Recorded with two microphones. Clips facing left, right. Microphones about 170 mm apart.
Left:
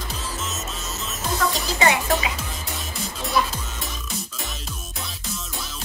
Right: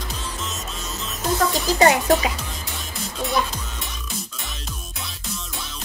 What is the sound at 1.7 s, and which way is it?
Speech, 40° right (ahead or behind).